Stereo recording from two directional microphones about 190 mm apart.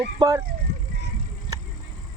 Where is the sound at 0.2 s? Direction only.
15° right (ahead or behind).